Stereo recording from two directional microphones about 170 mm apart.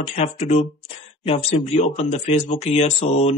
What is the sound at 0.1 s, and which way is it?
A man's voice, 40° left (ahead or behind).